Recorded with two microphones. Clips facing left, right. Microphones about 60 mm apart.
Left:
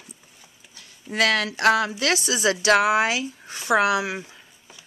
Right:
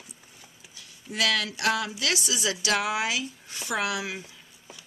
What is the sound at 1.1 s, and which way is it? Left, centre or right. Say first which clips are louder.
A woman's voice: left 5 dB; left.